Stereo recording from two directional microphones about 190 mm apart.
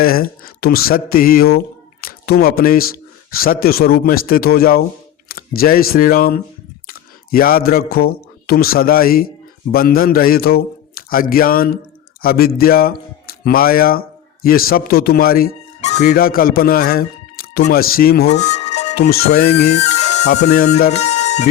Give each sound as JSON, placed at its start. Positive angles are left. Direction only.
{"t": 0.0, "sound": "a man's voice", "side_deg": 50}
{"t": 15.8, "sound": "a man's voice", "side_deg": 40}
{"t": 18.3, "sound": "music", "side_deg": 35}
{"t": 18.9, "sound": "a man's voice", "side_deg": 55}
{"t": 19.6, "sound": "music", "side_deg": 35}
{"t": 20.2, "sound": "music", "side_deg": 60}
{"t": 20.7, "sound": "speech", "side_deg": 40}